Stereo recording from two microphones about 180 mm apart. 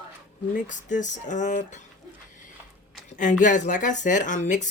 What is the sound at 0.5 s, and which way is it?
Speech, 45° left (ahead or behind).